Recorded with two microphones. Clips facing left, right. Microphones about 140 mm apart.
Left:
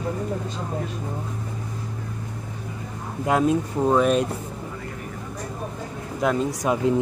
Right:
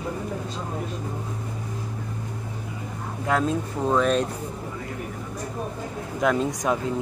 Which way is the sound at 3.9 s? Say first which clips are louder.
Left 2 dB; 10° left (ahead or behind).